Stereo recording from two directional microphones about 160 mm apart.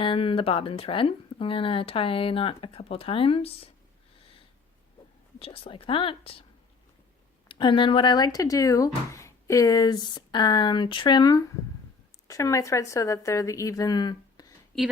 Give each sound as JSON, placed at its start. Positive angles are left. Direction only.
{"t": 0.0, "sound": "speech", "side_deg": 35}
{"t": 5.4, "sound": "speech", "side_deg": 35}
{"t": 7.4, "sound": "speech", "side_deg": 30}